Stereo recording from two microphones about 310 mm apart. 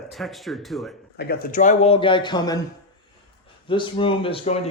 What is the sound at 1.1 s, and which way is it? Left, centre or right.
Speech, left.